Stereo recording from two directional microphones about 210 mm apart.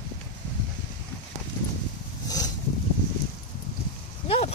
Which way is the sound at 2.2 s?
15° left (ahead or behind).